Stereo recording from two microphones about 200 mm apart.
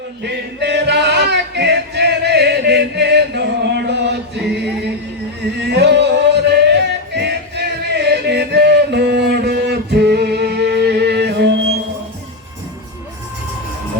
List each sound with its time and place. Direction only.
0.2 s male singing: 60° right (ahead or behind)
5.7 s music: 60° right (ahead or behind)